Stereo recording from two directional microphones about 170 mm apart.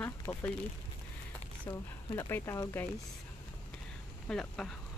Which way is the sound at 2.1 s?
20° left (ahead or behind).